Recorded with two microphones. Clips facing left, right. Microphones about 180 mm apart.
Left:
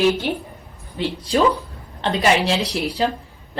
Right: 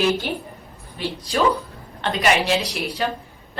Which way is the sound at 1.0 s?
25° left (ahead or behind).